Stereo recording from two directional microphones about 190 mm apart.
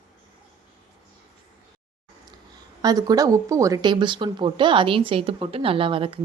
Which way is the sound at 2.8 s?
20° right (ahead or behind).